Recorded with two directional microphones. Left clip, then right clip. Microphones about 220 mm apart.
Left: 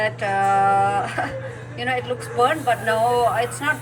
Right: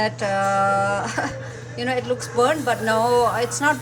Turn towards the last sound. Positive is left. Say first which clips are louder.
# even
turn(degrees=-15)  # may be behind; listen again after turning